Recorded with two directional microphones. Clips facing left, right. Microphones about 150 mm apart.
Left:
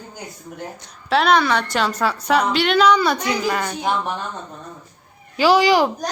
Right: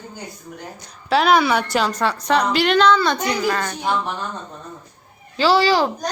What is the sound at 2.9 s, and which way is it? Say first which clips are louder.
Speech: even; 10° left (ahead or behind).